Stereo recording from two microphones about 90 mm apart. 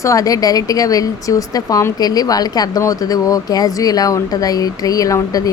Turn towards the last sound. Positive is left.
turn(degrees=40)  # may be behind; listen again after turning